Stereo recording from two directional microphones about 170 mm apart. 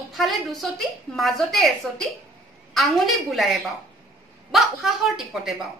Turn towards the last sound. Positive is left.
turn(degrees=-5)  # may be behind; listen again after turning